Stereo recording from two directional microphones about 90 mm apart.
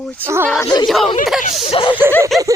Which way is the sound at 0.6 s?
55° left (ahead or behind).